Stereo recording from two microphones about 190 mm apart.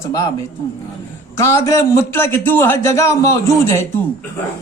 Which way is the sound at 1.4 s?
15° left (ahead or behind).